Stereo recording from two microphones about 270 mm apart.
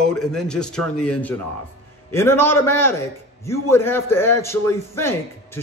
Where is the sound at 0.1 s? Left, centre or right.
Centre.